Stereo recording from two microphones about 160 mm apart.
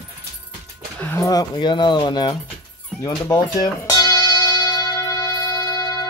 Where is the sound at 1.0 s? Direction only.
15° left (ahead or behind).